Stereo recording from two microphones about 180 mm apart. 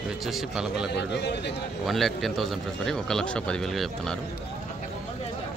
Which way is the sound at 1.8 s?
Centre (ahead or behind).